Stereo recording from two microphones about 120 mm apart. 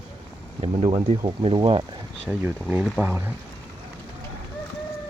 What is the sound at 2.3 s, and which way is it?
Speech, 10° right (ahead or behind).